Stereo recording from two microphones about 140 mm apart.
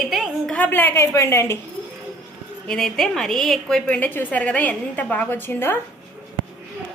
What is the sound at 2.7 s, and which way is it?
A woman's voice, 5° left (ahead or behind).